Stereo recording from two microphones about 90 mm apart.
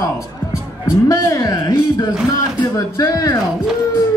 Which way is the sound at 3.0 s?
40° left (ahead or behind).